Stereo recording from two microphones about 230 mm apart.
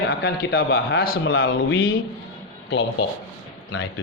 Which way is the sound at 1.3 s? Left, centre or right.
Left.